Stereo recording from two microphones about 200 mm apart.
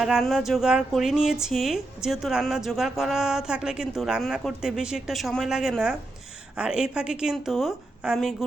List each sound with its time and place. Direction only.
0.0 s speech: centre (ahead or behind)